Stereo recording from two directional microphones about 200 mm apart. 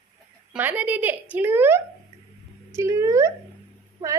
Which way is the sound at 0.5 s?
10° right (ahead or behind).